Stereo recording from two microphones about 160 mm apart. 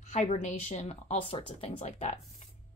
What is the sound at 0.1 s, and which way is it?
Speech, 45° left (ahead or behind).